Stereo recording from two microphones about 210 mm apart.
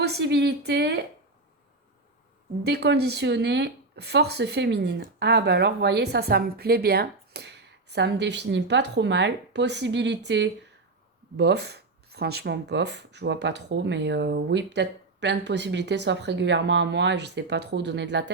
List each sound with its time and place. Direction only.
0.0 s speech: 50° right (ahead or behind)
2.6 s speech: 50° right (ahead or behind)